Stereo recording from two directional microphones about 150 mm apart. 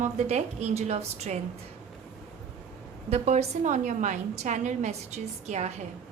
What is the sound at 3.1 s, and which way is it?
A woman's voice, 50° right (ahead or behind).